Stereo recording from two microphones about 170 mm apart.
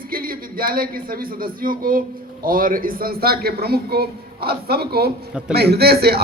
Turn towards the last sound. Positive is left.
turn(degrees=-65)  # may be behind; listen again after turning